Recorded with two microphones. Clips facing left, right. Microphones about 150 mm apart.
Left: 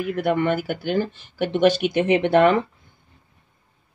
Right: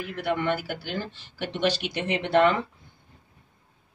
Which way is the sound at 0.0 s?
50° left (ahead or behind).